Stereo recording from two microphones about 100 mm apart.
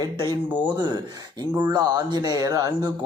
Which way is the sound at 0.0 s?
45° right (ahead or behind).